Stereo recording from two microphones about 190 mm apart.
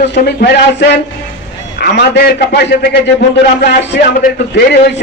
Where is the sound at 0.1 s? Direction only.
60° left (ahead or behind).